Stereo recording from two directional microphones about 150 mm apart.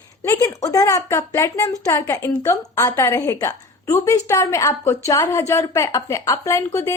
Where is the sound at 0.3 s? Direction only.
20° left (ahead or behind).